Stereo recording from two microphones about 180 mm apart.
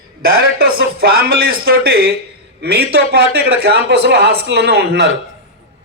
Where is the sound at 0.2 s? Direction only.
55° right (ahead or behind).